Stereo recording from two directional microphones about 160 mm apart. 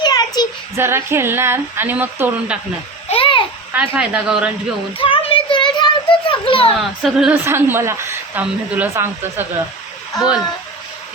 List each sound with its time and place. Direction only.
0.0 s child singing: 25° left (ahead or behind)
0.8 s speech: 15° right (ahead or behind)
3.1 s a sound: 35° left (ahead or behind)
3.7 s speech: 5° right (ahead or behind)
4.9 s a sound: 35° left (ahead or behind)
7.0 s speech: centre (ahead or behind)
7.4 s speech: 15° right (ahead or behind)